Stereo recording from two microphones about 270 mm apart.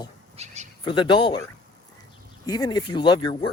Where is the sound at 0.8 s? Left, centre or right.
Centre.